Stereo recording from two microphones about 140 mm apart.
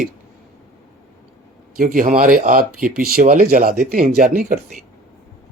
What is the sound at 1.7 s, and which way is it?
Speech, 80° right.